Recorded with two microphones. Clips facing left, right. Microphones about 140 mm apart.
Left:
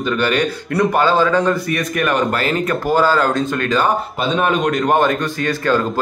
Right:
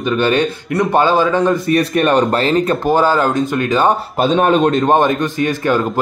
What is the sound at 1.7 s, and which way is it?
Speech, 30° right (ahead or behind).